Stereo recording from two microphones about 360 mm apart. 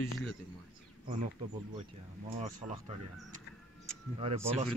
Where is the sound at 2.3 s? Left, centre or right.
Centre.